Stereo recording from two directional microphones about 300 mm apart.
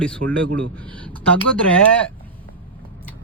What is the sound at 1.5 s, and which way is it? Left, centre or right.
Speech, centre.